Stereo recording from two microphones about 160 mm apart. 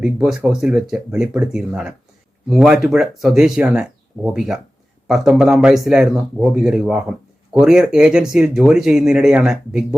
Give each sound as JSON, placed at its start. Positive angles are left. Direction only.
{"t": 0.0, "sound": "speech", "side_deg": -5}